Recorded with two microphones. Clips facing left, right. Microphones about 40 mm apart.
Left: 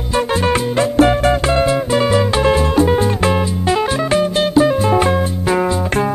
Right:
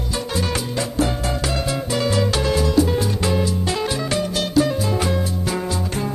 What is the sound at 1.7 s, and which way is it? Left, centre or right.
Music, left.